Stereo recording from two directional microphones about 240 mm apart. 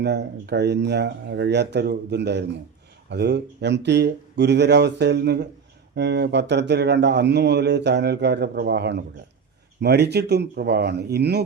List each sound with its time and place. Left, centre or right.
0.0 s speech: right